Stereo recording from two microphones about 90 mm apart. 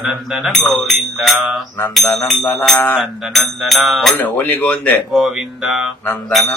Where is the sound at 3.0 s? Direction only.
Centre (ahead or behind).